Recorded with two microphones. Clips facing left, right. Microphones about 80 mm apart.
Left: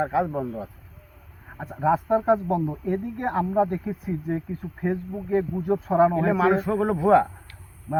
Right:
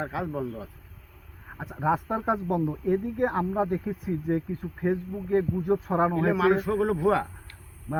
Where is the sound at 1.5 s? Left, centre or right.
Centre.